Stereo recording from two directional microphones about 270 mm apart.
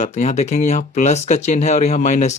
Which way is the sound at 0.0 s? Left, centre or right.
Left.